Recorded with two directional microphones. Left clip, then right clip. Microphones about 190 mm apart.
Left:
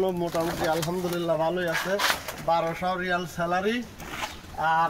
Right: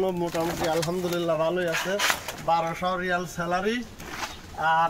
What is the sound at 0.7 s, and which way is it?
Speech, 10° right (ahead or behind).